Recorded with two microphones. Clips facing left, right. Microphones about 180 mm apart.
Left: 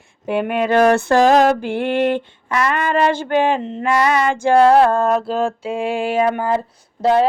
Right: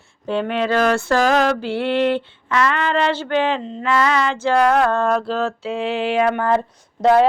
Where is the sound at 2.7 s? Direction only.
10° left (ahead or behind).